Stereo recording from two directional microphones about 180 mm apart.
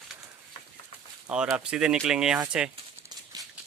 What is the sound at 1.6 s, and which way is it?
Speech, 5° right (ahead or behind).